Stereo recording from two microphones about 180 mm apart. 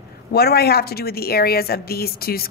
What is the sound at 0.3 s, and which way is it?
A woman's voice, 60° left (ahead or behind).